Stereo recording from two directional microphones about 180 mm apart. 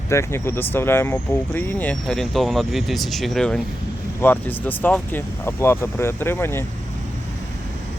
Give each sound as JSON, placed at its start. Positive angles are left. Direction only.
{"t": 0.1, "sound": "speech", "side_deg": 15}